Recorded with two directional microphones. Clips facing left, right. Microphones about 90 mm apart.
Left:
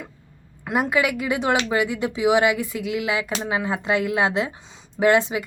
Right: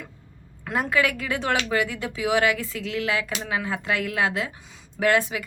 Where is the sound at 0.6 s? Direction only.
20° left (ahead or behind).